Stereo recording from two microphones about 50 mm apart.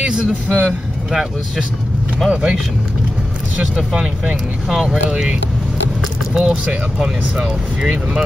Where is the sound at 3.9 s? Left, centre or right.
Centre.